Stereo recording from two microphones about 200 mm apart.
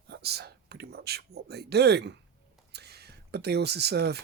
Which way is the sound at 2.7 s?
55° right (ahead or behind).